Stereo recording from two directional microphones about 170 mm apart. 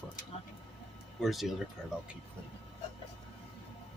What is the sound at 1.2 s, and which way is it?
Speech, centre (ahead or behind).